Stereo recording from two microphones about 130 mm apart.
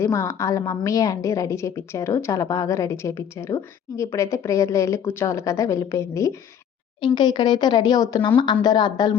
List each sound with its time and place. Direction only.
0.0 s a woman's voice: 25° left (ahead or behind)
7.0 s speech: 35° left (ahead or behind)